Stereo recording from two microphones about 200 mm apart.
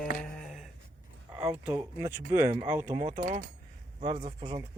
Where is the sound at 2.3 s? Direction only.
35° right (ahead or behind).